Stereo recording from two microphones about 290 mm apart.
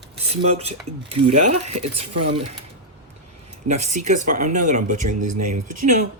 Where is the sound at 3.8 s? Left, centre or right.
Right.